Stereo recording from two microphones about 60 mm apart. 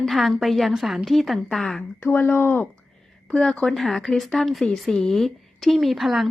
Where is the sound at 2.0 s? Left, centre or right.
Left.